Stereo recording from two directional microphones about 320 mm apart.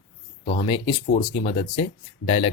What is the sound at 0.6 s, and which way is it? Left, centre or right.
Speech, centre.